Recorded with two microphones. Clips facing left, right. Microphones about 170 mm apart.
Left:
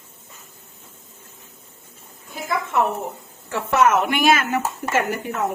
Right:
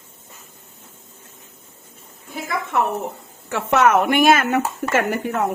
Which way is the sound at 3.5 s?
70° right (ahead or behind).